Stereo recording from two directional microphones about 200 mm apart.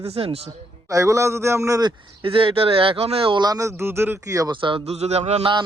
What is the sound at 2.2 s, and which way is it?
Speech, 25° right (ahead or behind).